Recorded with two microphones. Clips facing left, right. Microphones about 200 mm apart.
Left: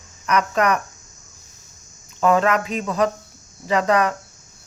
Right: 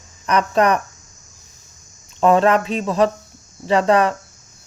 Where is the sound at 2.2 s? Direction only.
30° right (ahead or behind).